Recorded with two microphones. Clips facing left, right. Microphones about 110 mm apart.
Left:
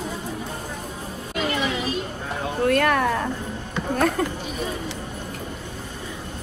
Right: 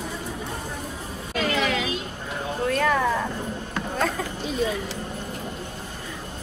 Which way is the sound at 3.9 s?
60° left (ahead or behind).